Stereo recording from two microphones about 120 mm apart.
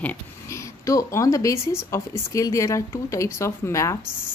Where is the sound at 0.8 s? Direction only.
25° left (ahead or behind).